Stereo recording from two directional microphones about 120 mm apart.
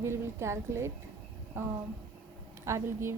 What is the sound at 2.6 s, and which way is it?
Speech, 25° right (ahead or behind).